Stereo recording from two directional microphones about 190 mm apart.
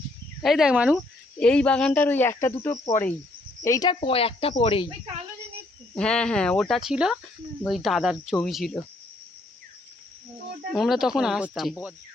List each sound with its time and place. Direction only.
0.4 s speech: centre (ahead or behind)
1.4 s speech: 5° left (ahead or behind); by 4.9 s 25° left (ahead or behind)
5.9 s speech: 5° left (ahead or behind)
10.7 s speech: centre (ahead or behind)